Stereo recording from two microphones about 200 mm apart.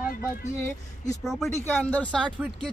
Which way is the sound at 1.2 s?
Centre (ahead or behind).